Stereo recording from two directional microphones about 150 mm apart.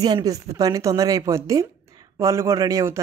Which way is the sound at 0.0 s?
25° right (ahead or behind).